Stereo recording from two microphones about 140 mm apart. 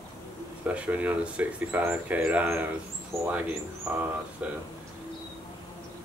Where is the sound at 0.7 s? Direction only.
10° right (ahead or behind).